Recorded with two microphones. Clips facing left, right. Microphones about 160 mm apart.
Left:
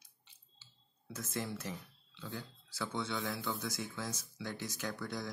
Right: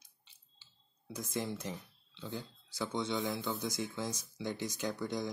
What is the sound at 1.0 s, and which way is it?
Speech, 20° right (ahead or behind).